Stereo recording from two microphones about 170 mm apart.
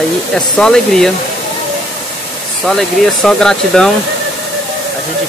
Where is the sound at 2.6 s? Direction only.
Centre (ahead or behind).